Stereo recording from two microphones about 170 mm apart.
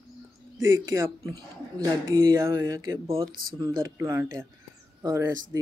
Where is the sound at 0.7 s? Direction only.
20° right (ahead or behind).